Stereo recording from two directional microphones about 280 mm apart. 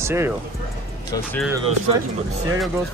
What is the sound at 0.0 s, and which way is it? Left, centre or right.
Speech, centre.